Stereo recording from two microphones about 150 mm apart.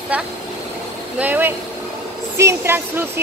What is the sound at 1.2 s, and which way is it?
Speech, 10° right (ahead or behind).